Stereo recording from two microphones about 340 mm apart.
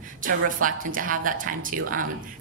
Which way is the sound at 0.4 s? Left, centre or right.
Right.